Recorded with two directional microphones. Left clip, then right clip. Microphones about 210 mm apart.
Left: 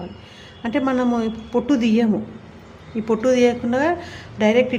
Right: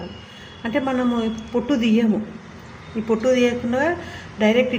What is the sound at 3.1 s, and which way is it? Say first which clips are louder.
A woman's voice: left 1 dB; 20° left (ahead or behind).